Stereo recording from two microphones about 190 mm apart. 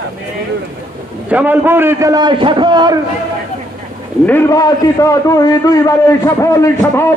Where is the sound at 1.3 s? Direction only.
10° right (ahead or behind).